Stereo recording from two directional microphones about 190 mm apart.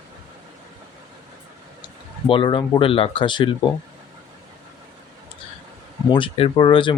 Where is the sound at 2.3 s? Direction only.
25° left (ahead or behind).